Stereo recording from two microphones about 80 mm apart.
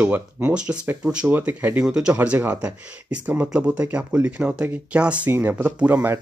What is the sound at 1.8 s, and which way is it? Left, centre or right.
Speech, centre.